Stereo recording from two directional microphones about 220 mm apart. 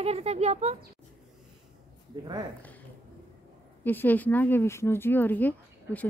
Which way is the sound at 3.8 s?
10° left (ahead or behind).